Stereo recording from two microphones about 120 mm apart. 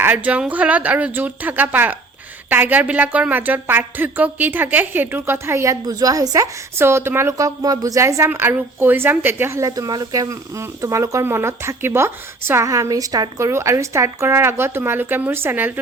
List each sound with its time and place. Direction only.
0.0 s a woman's voice: 15° right (ahead or behind)
5.8 s a woman's voice: 30° right (ahead or behind); by 15.8 s 15° right (ahead or behind)